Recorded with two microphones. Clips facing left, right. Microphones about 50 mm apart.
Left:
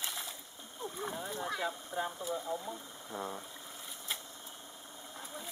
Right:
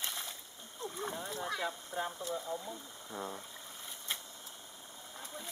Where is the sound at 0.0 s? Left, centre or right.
Centre.